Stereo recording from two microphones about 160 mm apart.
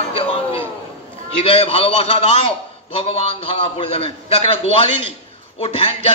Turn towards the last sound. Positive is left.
turn(degrees=35)  # may be behind; listen again after turning